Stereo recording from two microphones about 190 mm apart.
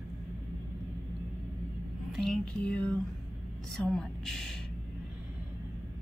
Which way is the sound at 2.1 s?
Centre (ahead or behind).